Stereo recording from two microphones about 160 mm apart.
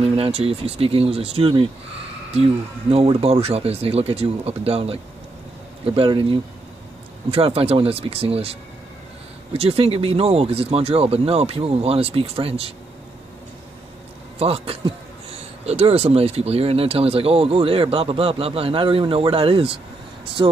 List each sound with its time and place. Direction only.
0.0 s speech: 35° right (ahead or behind)
2.9 s speech: 40° right (ahead or behind)
14.4 s speech: 35° right (ahead or behind)